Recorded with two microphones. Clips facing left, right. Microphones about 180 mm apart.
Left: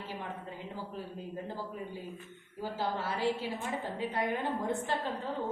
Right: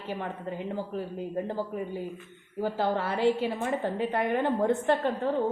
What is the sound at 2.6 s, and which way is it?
A woman's voice, 65° right (ahead or behind).